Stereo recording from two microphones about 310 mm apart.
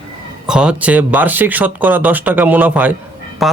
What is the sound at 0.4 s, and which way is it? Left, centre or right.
Speech, centre.